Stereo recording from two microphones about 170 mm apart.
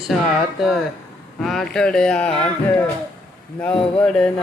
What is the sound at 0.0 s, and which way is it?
Speech, centre (ahead or behind).